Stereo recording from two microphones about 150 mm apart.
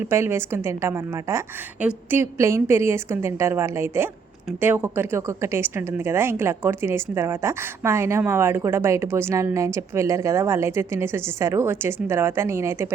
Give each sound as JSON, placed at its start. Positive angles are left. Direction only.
{"t": 0.0, "sound": "a woman's voice", "side_deg": -15}